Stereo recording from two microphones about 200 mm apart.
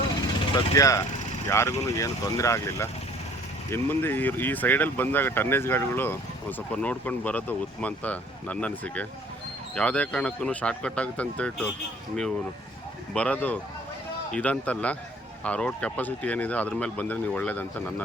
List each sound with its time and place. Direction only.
0.5 s speech: 15° left (ahead or behind)
13.1 s speech: 5° left (ahead or behind)